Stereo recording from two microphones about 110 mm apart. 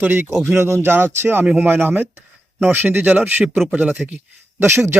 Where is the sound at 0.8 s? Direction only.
20° right (ahead or behind).